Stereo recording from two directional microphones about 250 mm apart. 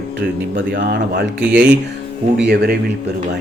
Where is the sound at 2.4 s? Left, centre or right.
Right.